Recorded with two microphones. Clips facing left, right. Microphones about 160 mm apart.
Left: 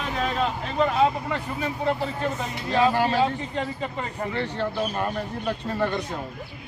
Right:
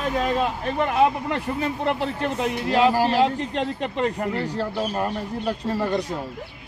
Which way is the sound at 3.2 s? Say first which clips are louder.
Right 3 dB; 85° right.